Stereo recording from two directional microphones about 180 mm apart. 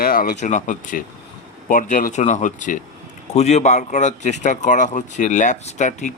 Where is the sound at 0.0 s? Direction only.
55° left (ahead or behind).